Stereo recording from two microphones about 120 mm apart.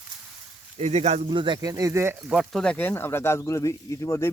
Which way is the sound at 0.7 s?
65° right (ahead or behind).